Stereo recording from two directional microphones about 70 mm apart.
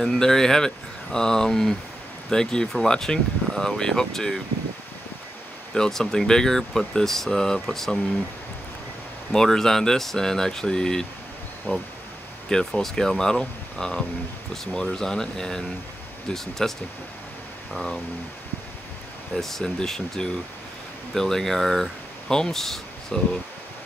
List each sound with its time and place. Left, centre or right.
0.0 s speech: centre
5.8 s speech: centre
9.3 s speech: centre
11.7 s speech: centre
17.7 s speech: centre
19.3 s speech: centre